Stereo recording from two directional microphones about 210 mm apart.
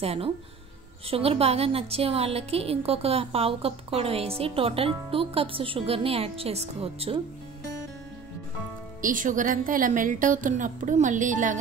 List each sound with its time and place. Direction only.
0.0 s a woman's voice: 30° right (ahead or behind)
9.0 s a woman's voice: 40° right (ahead or behind)